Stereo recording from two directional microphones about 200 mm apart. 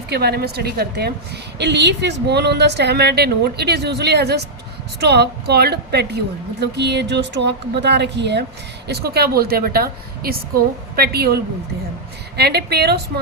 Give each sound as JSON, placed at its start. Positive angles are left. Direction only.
{"t": 0.1, "sound": "a woman's voice", "side_deg": -55}
{"t": 12.4, "sound": "a woman's voice", "side_deg": -55}